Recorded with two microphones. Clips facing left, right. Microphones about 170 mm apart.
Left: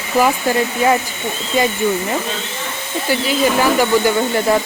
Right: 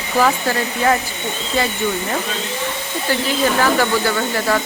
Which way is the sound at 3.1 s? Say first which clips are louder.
Left 2 dB; 15° left (ahead or behind).